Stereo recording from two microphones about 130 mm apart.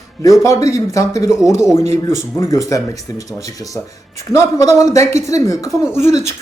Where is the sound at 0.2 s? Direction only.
25° left (ahead or behind).